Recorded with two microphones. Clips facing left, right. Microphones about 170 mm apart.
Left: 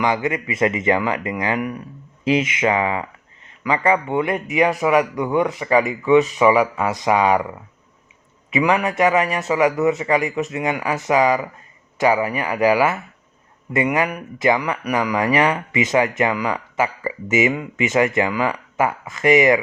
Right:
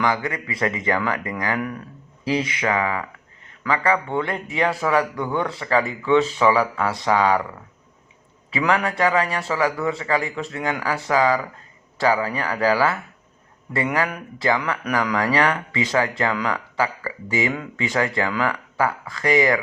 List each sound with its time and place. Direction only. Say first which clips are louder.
0.0 s speech: left 3 dB; 20° left (ahead or behind)
8.4 s speech: left 3 dB; 15° left (ahead or behind)